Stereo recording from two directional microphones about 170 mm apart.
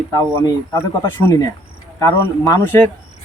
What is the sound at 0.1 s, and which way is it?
Speech, 20° left (ahead or behind).